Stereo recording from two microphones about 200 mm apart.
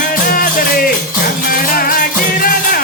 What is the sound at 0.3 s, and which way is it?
Music, 45° left (ahead or behind).